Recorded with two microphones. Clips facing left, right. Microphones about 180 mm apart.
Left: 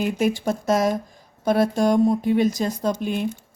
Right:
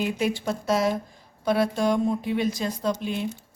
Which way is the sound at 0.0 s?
45° left (ahead or behind).